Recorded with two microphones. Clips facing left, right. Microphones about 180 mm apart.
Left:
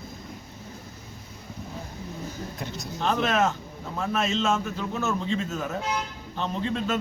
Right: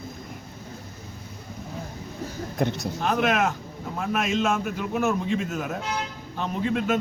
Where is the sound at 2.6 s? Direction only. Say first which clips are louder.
Right 15 dB; 65° right (ahead or behind).